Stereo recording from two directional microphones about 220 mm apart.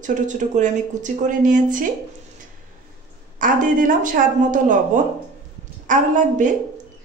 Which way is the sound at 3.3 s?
35° right (ahead or behind).